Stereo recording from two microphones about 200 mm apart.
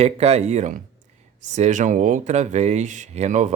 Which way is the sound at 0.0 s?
30° right (ahead or behind).